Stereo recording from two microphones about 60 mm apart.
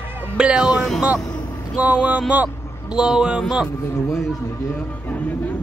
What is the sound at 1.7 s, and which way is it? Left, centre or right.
Music, right.